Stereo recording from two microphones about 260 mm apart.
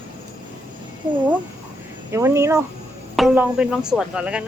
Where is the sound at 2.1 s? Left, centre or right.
Centre.